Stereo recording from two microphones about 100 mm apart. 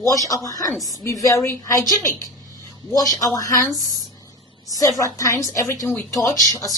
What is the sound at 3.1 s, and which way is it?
Speech, 35° left (ahead or behind).